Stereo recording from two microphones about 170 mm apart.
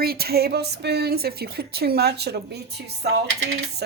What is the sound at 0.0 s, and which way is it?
A woman's voice, 65° right (ahead or behind).